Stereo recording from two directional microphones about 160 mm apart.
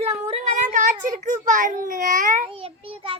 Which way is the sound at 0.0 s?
40° right (ahead or behind).